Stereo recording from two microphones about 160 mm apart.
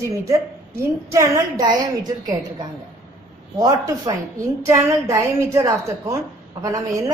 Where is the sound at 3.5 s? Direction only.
25° right (ahead or behind).